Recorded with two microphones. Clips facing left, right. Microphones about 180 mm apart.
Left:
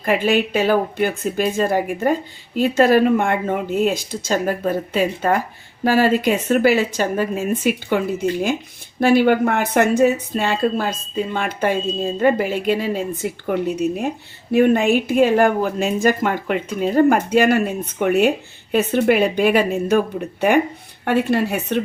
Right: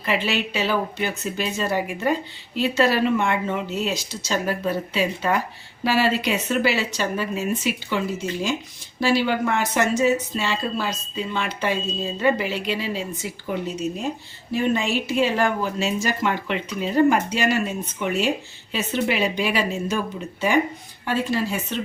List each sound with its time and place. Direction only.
0.0 s speech: 50° left (ahead or behind)